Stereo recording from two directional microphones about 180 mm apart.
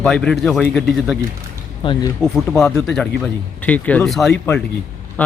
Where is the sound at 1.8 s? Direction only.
30° left (ahead or behind).